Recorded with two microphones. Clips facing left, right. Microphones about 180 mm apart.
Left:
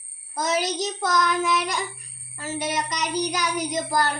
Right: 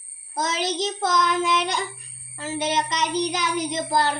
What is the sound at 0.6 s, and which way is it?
A child's voice, 25° right (ahead or behind).